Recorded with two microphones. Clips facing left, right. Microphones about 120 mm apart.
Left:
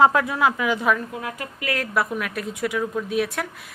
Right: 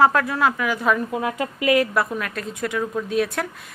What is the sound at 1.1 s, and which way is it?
Speech, 25° right (ahead or behind).